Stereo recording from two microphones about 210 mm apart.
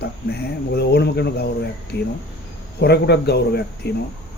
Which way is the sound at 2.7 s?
50° left (ahead or behind).